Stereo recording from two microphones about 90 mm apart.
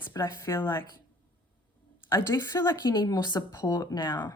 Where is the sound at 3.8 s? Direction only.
50° left (ahead or behind).